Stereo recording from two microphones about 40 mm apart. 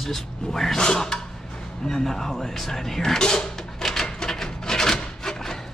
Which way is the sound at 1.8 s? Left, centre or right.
Centre.